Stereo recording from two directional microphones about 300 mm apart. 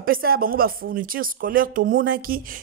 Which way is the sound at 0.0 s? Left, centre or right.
Right.